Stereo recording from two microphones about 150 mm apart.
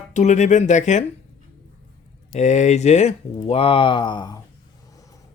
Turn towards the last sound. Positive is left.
turn(degrees=30)  # may be behind; listen again after turning